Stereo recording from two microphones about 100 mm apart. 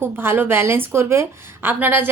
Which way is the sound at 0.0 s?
20° right (ahead or behind).